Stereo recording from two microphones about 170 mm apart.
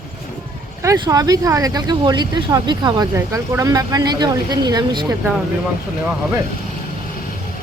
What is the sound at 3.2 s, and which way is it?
Speech, 15° right (ahead or behind).